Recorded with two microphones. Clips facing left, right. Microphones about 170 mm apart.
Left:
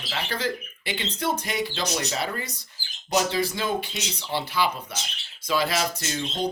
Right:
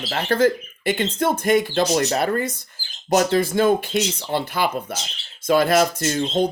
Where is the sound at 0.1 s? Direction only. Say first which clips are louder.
Right 10 dB; 50° right (ahead or behind).